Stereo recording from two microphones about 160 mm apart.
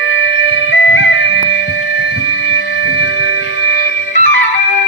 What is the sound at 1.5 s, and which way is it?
Music, 90° left.